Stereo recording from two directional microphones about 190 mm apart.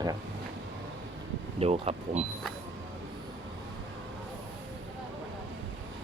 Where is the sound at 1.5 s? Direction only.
30° right (ahead or behind).